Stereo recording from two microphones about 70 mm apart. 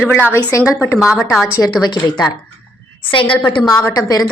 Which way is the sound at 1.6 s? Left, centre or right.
Left.